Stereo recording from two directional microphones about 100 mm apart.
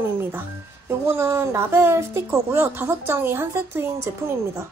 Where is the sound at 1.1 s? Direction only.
25° right (ahead or behind).